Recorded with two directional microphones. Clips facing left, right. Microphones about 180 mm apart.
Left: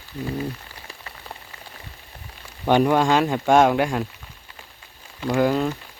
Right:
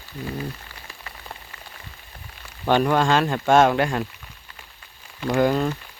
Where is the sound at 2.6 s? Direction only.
15° left (ahead or behind).